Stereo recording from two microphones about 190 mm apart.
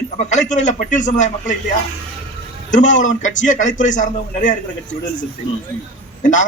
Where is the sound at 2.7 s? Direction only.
40° left (ahead or behind).